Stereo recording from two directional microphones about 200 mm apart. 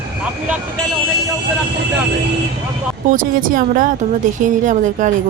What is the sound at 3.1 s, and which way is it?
A woman's voice, 45° right (ahead or behind).